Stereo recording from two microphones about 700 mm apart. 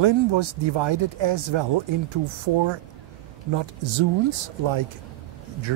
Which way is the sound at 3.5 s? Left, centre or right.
Right.